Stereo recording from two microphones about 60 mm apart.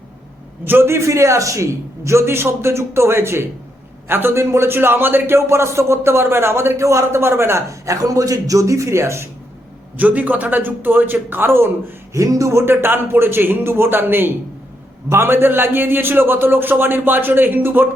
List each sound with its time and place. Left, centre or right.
0.6 s a man's voice: right
10.0 s a man's voice: right
12.1 s a man's voice: right